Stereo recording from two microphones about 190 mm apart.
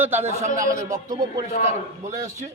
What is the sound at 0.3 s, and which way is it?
Speech, 40° right (ahead or behind).